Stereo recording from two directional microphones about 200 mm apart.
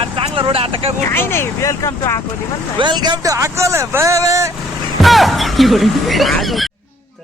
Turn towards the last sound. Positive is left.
turn(degrees=0)  # may be behind; listen again after turning